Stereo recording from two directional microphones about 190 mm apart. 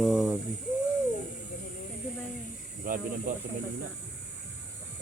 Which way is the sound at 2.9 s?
45° right (ahead or behind).